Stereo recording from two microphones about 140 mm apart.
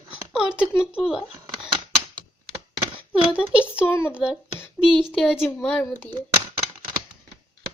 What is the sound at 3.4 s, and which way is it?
Speech, 10° right (ahead or behind).